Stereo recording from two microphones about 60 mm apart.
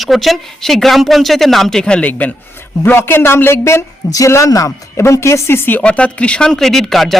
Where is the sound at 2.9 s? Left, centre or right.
Left.